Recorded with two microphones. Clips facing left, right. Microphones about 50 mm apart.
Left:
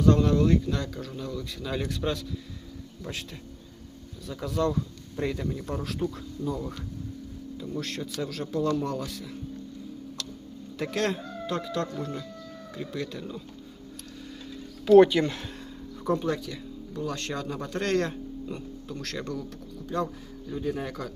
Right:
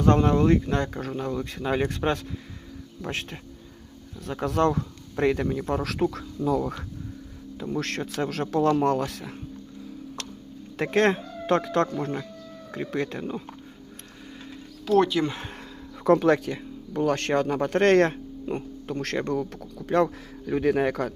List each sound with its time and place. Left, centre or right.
0.0 s speech: right
3.0 s speech: right
5.7 s speech: right
7.6 s speech: right
10.2 s tick-tock: right
10.8 s speech: right
14.8 s speech: centre
16.0 s speech: right
19.5 s speech: right